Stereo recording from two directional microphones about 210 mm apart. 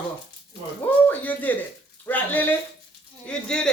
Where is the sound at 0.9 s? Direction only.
10° left (ahead or behind).